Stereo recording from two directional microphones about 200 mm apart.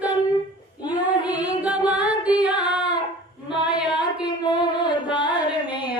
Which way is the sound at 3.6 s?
5° right (ahead or behind).